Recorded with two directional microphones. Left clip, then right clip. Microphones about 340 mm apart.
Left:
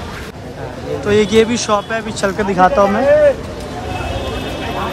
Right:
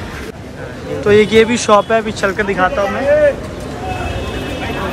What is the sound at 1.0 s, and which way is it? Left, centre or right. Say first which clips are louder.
Speech: right 3 dB; centre.